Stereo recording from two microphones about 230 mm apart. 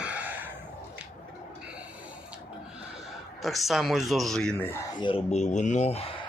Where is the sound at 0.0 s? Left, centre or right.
Centre.